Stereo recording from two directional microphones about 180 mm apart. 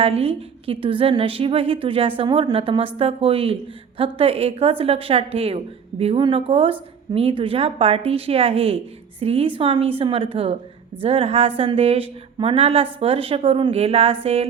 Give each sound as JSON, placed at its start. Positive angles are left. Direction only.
{"t": 0.0, "sound": "a woman's voice", "side_deg": -35}